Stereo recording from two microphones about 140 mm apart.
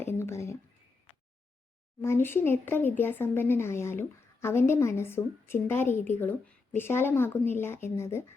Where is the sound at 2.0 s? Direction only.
15° left (ahead or behind).